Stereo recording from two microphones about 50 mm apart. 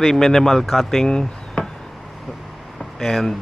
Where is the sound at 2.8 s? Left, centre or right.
Centre.